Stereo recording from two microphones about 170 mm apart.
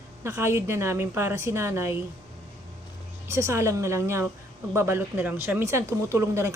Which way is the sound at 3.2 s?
15° right (ahead or behind).